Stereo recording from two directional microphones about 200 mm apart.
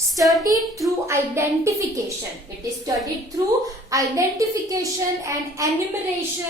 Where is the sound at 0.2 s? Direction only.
Centre (ahead or behind).